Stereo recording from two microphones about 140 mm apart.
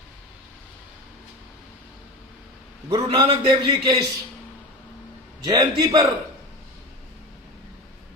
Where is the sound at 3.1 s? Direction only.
30° right (ahead or behind).